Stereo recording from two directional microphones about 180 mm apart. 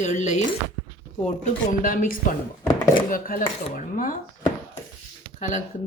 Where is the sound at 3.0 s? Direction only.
50° left (ahead or behind).